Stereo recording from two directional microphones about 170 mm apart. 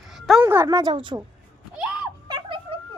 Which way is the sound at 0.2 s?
Centre (ahead or behind).